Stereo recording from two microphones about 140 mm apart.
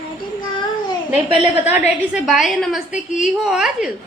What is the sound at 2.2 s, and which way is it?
A woman's voice, centre (ahead or behind).